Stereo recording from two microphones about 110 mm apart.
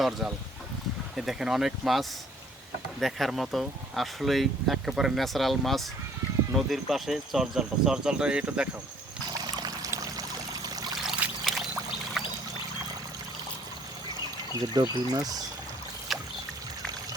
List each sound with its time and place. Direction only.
0.0 s speech: centre (ahead or behind)
9.4 s pour: 40° right (ahead or behind)
11.2 s pour: 10° right (ahead or behind)
14.6 s speech: 40° right (ahead or behind)
16.1 s boat: centre (ahead or behind)